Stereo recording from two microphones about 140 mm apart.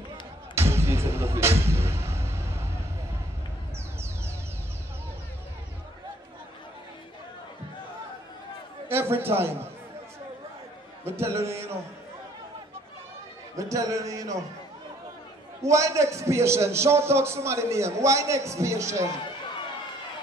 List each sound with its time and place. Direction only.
0.6 s music: 20° right (ahead or behind)
8.8 s a man's voice: 15° right (ahead or behind)
11.1 s a man's voice: 20° right (ahead or behind)
13.6 s a man's voice: 25° right (ahead or behind)
15.6 s a man's voice: 20° right (ahead or behind)